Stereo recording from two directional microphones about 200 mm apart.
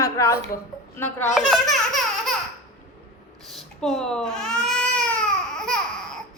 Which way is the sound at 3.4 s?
Centre (ahead or behind).